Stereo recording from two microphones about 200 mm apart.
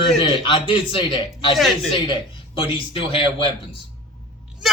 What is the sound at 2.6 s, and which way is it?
Speech, 25° left (ahead or behind).